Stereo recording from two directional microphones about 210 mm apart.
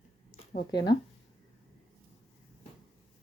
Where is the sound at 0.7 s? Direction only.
20° left (ahead or behind).